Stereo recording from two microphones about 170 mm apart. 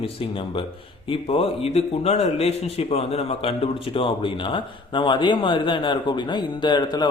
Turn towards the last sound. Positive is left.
turn(degrees=25)  # may be behind; listen again after turning